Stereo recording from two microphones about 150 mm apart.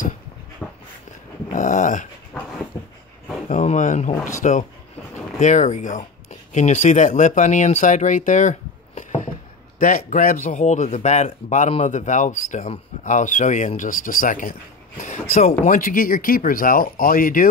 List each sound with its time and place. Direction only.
0.6 s a sound: 5° left (ahead or behind)
1.5 s dog: 55° left (ahead or behind)
3.4 s speech: 55° left (ahead or behind)